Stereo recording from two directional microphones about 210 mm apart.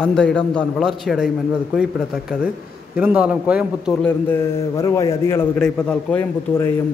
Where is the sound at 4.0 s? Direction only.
15° left (ahead or behind).